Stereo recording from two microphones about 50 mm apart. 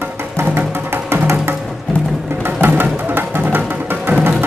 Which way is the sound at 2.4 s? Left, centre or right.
Right.